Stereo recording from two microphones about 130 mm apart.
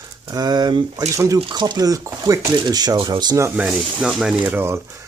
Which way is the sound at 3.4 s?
10° right (ahead or behind).